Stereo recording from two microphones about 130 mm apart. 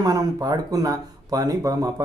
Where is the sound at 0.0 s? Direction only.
30° right (ahead or behind).